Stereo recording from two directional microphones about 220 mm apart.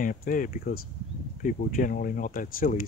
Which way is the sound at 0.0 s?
40° left (ahead or behind).